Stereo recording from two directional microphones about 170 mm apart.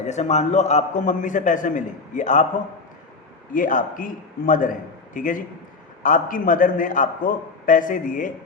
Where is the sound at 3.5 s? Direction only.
50° left (ahead or behind).